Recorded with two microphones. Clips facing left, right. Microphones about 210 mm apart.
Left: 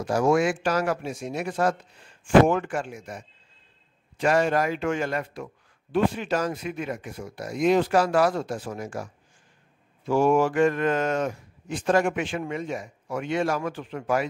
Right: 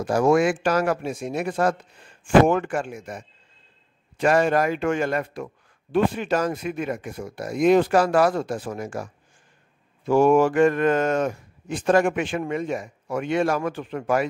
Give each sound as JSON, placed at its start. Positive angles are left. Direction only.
{"t": 0.0, "sound": "speech", "side_deg": -55}
{"t": 10.0, "sound": "speech", "side_deg": -50}